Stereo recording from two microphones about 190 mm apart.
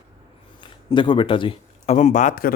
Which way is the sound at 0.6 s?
25° left (ahead or behind).